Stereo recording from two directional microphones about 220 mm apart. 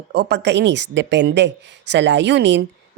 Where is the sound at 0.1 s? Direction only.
50° right (ahead or behind).